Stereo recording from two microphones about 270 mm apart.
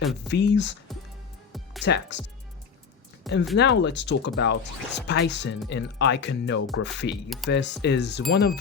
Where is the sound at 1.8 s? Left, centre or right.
Left.